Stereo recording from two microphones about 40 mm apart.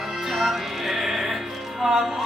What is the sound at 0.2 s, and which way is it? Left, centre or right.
Music, centre.